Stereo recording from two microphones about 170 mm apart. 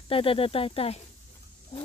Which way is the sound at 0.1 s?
35° left (ahead or behind).